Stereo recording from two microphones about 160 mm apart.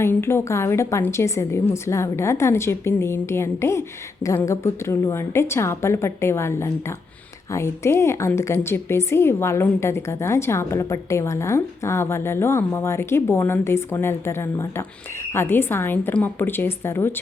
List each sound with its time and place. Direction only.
0.0 s a woman's voice: 15° left (ahead or behind)